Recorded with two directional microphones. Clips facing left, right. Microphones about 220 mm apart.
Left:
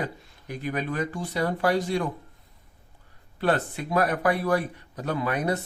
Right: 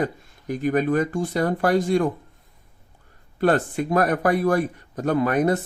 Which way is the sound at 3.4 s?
50° right (ahead or behind).